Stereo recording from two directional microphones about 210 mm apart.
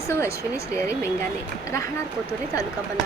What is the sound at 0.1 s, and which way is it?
Speech, 15° left (ahead or behind).